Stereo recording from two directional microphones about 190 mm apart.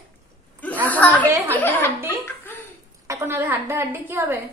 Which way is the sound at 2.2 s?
10° left (ahead or behind).